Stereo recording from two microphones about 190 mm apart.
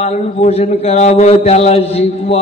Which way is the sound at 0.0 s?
35° left (ahead or behind).